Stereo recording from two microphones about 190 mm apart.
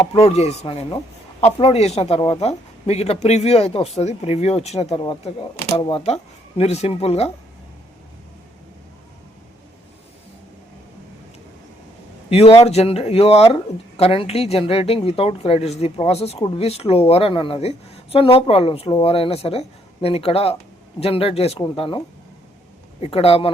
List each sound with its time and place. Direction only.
0.1 s speech: 30° left (ahead or behind)
12.3 s speech: 30° left (ahead or behind)